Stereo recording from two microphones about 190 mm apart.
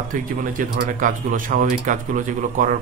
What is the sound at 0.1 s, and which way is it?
A man's voice, 45° right (ahead or behind).